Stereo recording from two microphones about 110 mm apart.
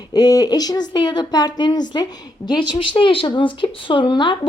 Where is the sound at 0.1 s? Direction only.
35° left (ahead or behind).